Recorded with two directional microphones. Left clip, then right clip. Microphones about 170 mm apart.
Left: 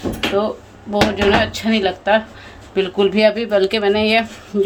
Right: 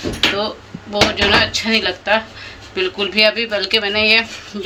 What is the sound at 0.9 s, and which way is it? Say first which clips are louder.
A woman's voice: right 1 dB; 55° left (ahead or behind).